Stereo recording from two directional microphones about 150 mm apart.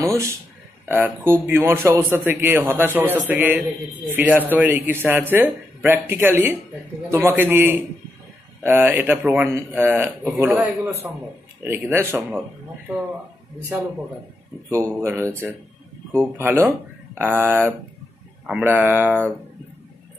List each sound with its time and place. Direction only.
0.8 s a man's voice: 15° right (ahead or behind)
14.7 s a man's voice: 20° right (ahead or behind)
16.3 s a man's voice: 15° right (ahead or behind)